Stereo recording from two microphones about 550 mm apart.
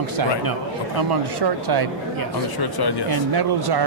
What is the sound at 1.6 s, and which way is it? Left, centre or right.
Speech, right.